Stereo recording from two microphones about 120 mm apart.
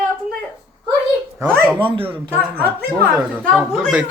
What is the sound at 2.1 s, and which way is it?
Speech, 15° right (ahead or behind).